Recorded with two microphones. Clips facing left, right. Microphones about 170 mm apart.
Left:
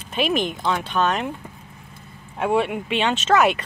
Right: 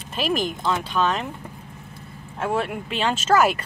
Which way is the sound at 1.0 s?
5° left (ahead or behind).